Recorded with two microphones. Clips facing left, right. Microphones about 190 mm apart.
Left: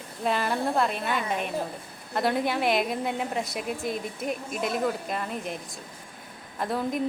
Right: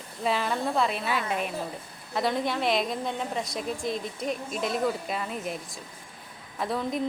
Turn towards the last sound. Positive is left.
turn(degrees=0)  # may be behind; listen again after turning